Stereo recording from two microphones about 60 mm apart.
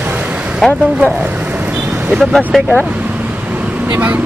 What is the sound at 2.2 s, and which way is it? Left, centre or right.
Speech, centre.